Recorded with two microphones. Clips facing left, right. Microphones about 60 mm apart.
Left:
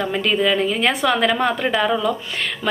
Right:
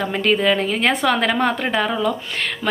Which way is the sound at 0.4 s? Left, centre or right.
Right.